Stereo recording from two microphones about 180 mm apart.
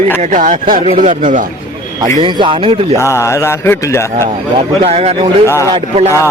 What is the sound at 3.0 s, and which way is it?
Speech, 15° left (ahead or behind).